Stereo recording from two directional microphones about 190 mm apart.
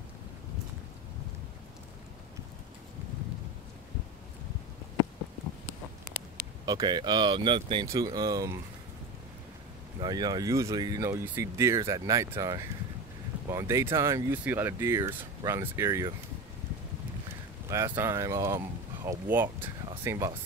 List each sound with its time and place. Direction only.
6.6 s speech: 20° right (ahead or behind)
9.9 s speech: 20° right (ahead or behind)
17.6 s speech: 15° right (ahead or behind)